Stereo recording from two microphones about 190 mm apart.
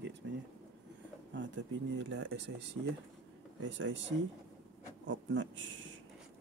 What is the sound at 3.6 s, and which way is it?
Speech, 75° right (ahead or behind).